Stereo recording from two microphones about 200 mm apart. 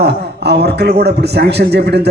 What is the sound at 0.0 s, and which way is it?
A man's voice, 55° right (ahead or behind).